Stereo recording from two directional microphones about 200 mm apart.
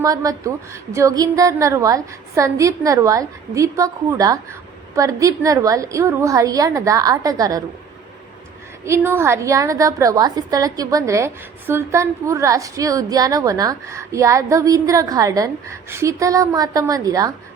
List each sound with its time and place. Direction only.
0.0 s a woman's voice: 20° right (ahead or behind)
8.8 s a woman's voice: 15° right (ahead or behind)